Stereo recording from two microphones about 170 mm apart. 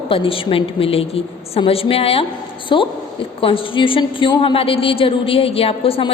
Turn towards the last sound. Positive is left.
turn(degrees=35)  # may be behind; listen again after turning